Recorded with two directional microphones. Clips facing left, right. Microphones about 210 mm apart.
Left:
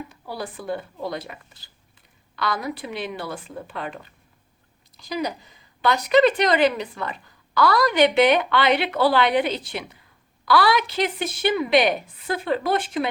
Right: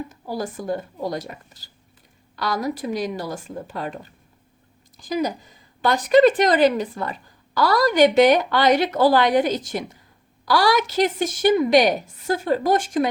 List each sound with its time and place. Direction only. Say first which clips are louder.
0.1 s a woman's voice: right 4 dB; 45° right (ahead or behind)